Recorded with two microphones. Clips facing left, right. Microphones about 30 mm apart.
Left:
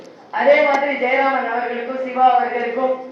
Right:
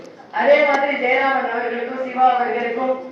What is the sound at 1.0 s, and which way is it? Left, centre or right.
Speech, left.